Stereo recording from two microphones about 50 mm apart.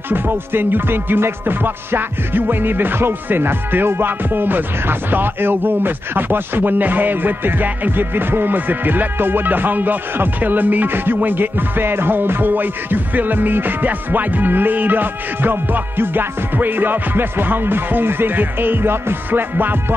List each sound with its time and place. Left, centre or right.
0.1 s music: right